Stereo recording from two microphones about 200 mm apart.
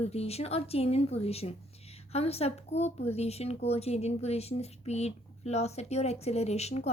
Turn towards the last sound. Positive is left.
turn(degrees=30)  # may be behind; listen again after turning